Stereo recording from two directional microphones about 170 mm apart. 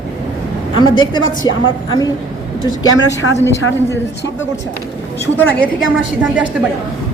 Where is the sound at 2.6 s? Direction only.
20° left (ahead or behind).